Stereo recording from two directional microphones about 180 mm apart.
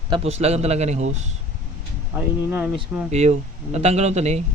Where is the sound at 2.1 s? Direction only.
10° right (ahead or behind).